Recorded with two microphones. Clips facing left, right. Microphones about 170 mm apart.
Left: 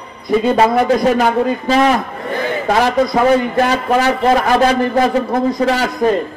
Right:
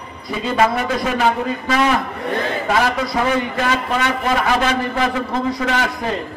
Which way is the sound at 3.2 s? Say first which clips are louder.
Left 6 dB; 35° left (ahead or behind).